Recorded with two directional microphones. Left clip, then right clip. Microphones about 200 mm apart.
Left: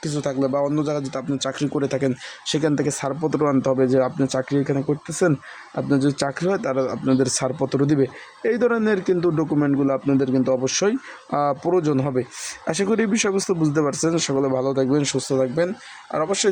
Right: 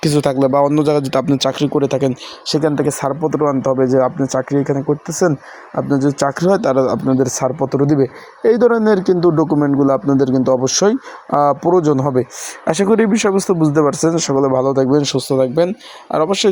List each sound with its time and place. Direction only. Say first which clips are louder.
0.0 s speech: right 9 dB; 40° right (ahead or behind)
1.5 s speech: right 8 dB; 20° right (ahead or behind)
2.6 s speech: right 6 dB; centre (ahead or behind); by 7.0 s 20° right (ahead or behind)
7.1 s speech: right 5 dB; 5° right (ahead or behind)
9.6 s speech: right 6 dB; 5° right (ahead or behind)
10.2 s speech: right 6 dB; 15° right (ahead or behind)